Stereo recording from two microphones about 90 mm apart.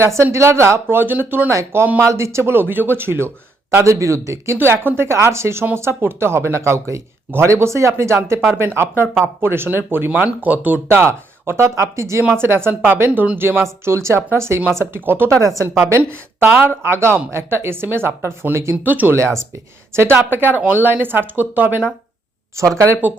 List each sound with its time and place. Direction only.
0.0 s speech: 30° right (ahead or behind)
15.4 s speech: 35° right (ahead or behind)
15.9 s speech: 25° right (ahead or behind)
19.1 s speech: 30° right (ahead or behind)